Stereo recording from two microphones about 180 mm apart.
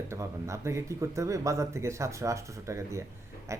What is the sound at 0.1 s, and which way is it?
A man's voice, 15° right (ahead or behind).